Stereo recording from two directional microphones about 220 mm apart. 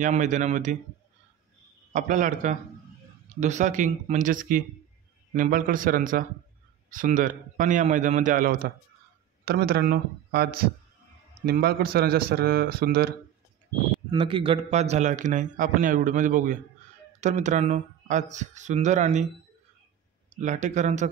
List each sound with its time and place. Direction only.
0.0 s a man's voice: 35° right (ahead or behind)
1.9 s a man's voice: 35° right (ahead or behind)
14.1 s a man's voice: 25° right (ahead or behind)
20.3 s a man's voice: 35° right (ahead or behind)